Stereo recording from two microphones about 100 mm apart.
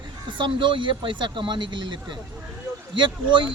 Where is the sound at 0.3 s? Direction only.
50° right (ahead or behind).